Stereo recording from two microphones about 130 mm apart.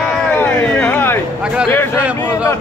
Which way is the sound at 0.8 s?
15° left (ahead or behind).